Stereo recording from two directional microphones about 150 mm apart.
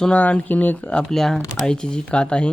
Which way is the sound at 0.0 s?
10° left (ahead or behind).